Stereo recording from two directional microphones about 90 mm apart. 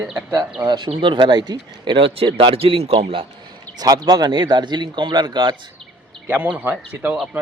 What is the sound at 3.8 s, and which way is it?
Speech, 45° right (ahead or behind).